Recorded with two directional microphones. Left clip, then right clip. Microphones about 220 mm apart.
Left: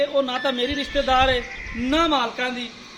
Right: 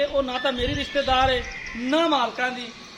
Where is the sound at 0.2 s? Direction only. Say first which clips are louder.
Left 2 dB; 30° left (ahead or behind).